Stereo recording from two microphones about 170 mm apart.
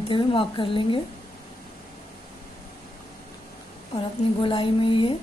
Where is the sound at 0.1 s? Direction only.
30° left (ahead or behind).